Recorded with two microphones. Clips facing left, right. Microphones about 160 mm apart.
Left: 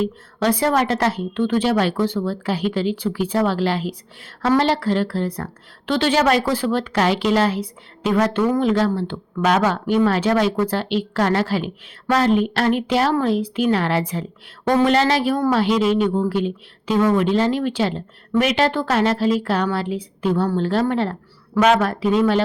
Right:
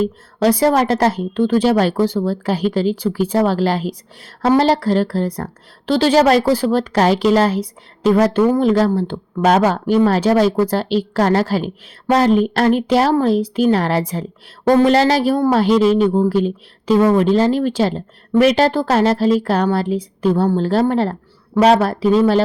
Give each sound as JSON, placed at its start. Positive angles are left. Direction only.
{"t": 0.0, "sound": "a woman's voice", "side_deg": -40}